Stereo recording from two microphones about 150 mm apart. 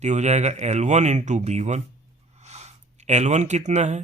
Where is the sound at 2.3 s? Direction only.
45° right (ahead or behind).